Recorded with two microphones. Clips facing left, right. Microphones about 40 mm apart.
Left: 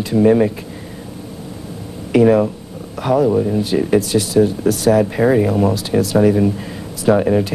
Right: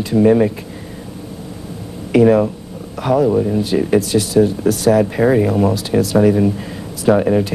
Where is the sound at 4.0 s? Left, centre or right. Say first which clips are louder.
Right 1 dB; left.